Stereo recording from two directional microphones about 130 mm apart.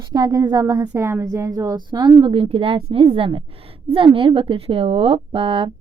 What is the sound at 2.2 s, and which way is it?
A woman's voice, 45° right (ahead or behind).